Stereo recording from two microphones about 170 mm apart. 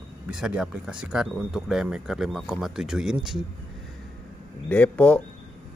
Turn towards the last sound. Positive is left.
turn(degrees=5)  # may be behind; listen again after turning